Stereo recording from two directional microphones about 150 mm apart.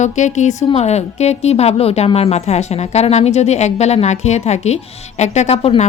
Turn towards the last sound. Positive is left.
turn(degrees=45)  # may be behind; listen again after turning